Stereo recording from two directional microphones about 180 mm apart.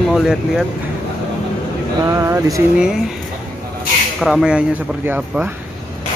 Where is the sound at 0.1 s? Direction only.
Centre (ahead or behind).